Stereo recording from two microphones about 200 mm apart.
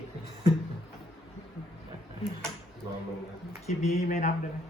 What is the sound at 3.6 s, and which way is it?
Speech, 35° left (ahead or behind).